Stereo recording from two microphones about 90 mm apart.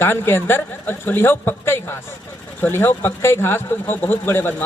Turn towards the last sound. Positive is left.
turn(degrees=25)  # may be behind; listen again after turning